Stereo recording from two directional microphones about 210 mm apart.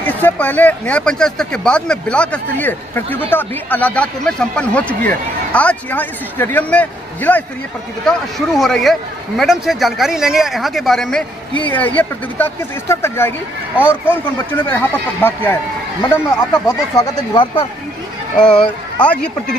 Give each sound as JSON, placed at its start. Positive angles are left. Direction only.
{"t": 0.0, "sound": "speech", "side_deg": 10}
{"t": 13.7, "sound": "speech", "side_deg": -5}
{"t": 14.1, "sound": "speech", "side_deg": 10}
{"t": 16.6, "sound": "speech", "side_deg": 15}
{"t": 18.4, "sound": "speech", "side_deg": 5}